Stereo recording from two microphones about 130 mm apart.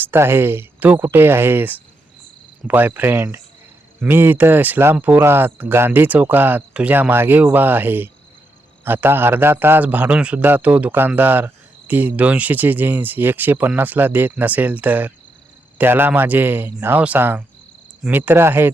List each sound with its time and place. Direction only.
0.0 s a man's voice: 15° right (ahead or behind)